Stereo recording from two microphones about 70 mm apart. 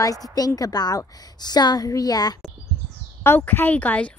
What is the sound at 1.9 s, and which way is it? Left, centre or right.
Speech, left.